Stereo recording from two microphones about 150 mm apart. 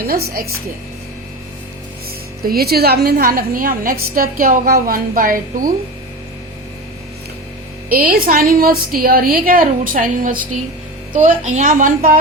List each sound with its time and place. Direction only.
0.0 s speech: 85° right
2.4 s a woman's voice: 85° right; by 5.7 s 65° right (ahead or behind)
7.9 s a woman's voice: 75° right (ahead or behind); by 12.1 s 60° right (ahead or behind)